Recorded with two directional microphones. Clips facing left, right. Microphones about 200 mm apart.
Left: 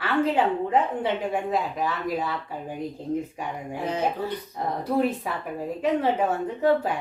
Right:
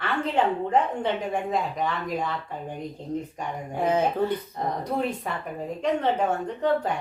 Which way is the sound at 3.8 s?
50° right (ahead or behind).